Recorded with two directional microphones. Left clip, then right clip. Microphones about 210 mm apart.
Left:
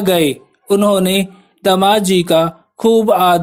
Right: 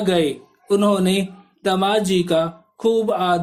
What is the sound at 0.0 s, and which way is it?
Speech, 35° left (ahead or behind).